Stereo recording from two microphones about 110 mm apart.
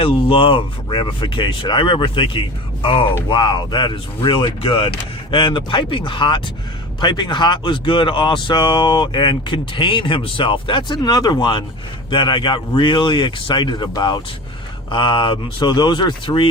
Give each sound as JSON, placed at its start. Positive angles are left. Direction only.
{"t": 0.0, "sound": "speech", "side_deg": 55}